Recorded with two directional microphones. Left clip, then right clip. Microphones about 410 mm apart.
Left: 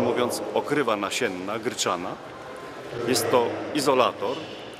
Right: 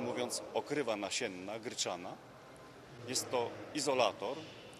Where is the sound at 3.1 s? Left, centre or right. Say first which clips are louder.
Left 15 dB; right.